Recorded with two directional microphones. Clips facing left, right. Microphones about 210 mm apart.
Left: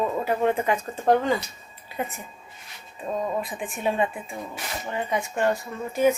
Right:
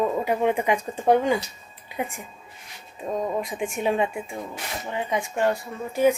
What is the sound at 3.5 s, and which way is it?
A woman's voice, 15° right (ahead or behind).